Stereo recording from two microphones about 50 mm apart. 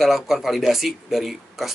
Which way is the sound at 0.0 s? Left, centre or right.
Centre.